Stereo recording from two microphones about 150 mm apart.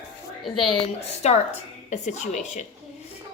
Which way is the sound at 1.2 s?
45° left (ahead or behind).